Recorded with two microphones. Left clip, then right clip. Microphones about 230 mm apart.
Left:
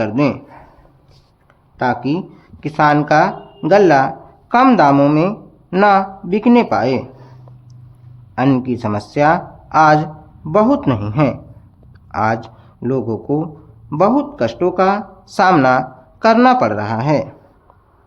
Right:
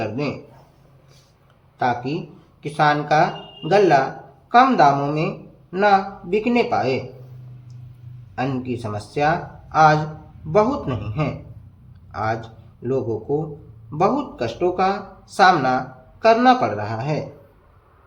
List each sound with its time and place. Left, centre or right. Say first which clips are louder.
0.0 s speech: left 9 dB; left
2.6 s speech: left 5 dB; left
8.4 s speech: left 9 dB; left